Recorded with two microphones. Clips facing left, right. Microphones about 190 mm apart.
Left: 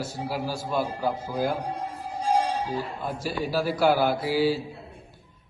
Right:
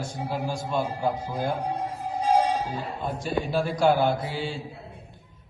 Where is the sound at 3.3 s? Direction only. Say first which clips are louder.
Right 3 dB; 25° right (ahead or behind).